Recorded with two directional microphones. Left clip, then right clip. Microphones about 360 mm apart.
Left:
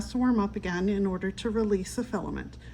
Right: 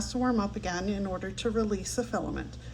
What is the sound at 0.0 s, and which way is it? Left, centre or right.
Speech, left.